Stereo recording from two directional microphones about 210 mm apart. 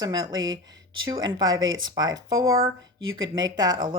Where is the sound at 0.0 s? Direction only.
20° right (ahead or behind).